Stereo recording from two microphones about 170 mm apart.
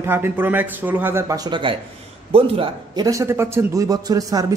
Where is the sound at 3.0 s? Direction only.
20° right (ahead or behind).